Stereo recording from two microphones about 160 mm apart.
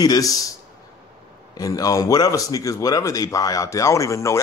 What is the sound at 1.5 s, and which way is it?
Speech, 20° left (ahead or behind).